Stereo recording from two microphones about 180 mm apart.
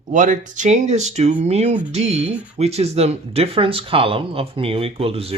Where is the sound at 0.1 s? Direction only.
45° right (ahead or behind).